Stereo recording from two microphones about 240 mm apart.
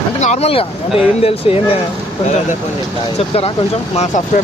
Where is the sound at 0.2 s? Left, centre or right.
Left.